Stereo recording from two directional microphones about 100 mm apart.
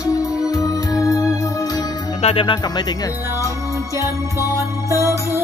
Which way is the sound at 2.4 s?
45° left (ahead or behind).